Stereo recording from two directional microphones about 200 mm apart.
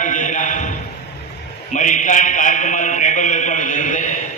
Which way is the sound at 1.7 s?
40° left (ahead or behind).